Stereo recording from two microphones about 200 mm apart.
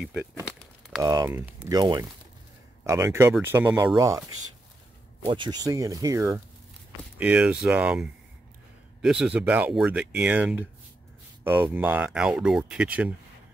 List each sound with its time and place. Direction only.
1.0 s speech: 15° right (ahead or behind)
5.2 s speech: 25° right (ahead or behind); by 13.1 s 5° right (ahead or behind)